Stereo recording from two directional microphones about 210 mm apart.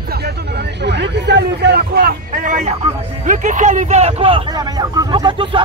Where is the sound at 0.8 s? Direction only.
55° right (ahead or behind); by 2.7 s 40° right (ahead or behind).